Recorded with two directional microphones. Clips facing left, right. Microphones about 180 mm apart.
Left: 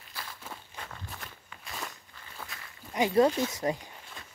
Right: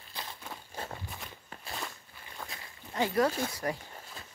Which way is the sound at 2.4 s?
10° right (ahead or behind).